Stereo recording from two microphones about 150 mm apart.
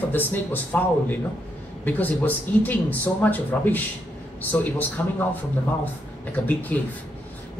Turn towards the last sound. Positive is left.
turn(degrees=10)  # may be behind; listen again after turning